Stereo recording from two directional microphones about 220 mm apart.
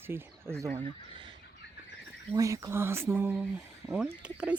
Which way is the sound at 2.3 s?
15° right (ahead or behind).